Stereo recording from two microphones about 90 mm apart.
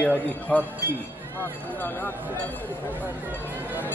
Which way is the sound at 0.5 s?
10° left (ahead or behind).